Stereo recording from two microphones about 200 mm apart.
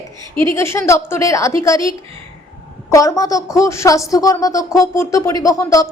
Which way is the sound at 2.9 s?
15° left (ahead or behind).